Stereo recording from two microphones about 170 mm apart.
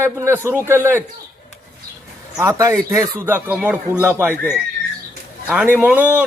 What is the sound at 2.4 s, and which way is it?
Speech, 20° right (ahead or behind).